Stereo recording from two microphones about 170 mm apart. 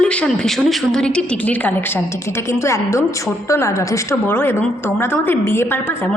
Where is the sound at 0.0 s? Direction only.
5° left (ahead or behind).